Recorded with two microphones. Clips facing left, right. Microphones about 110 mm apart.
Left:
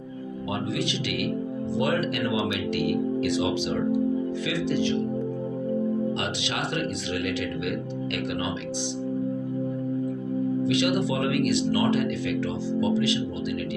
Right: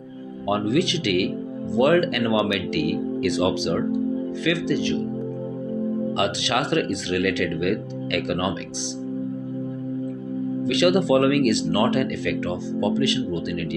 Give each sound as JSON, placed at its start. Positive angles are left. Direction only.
{"t": 0.5, "sound": "speech", "side_deg": -65}
{"t": 6.1, "sound": "speech", "side_deg": -65}
{"t": 10.7, "sound": "speech", "side_deg": -65}